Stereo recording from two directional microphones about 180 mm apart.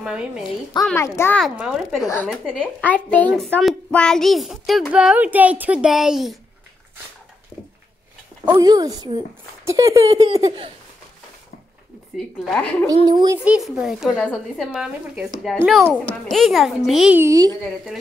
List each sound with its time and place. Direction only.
0.0 s a woman's voice: 5° right (ahead or behind)
0.8 s a child's voice: 15° left (ahead or behind)
1.4 s a child's voice: centre (ahead or behind)
8.5 s speech: 20° right (ahead or behind)
12.4 s a child's voice: 5° left (ahead or behind)
13.0 s speech: 25° right (ahead or behind)
13.4 s a child's voice: 5° right (ahead or behind)
16.3 s a child's voice: centre (ahead or behind)
17.2 s speech: 20° right (ahead or behind)